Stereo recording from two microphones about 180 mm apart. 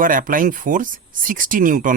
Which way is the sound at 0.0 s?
50° right (ahead or behind).